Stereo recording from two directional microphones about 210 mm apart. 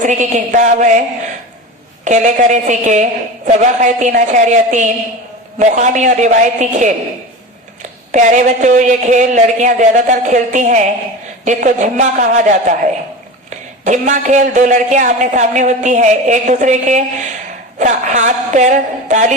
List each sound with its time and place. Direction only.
0.0 s a man's voice: 35° right (ahead or behind)
2.0 s a man's voice: 35° right (ahead or behind)